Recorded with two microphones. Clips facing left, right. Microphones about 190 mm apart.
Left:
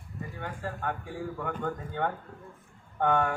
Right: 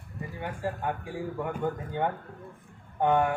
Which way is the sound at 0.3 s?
15° right (ahead or behind).